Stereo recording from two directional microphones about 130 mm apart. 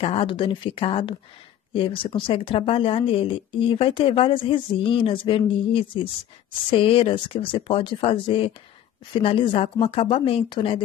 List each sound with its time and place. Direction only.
0.0 s speech: 45° left (ahead or behind)